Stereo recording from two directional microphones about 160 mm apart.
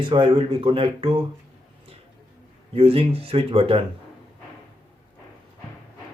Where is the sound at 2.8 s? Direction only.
40° right (ahead or behind).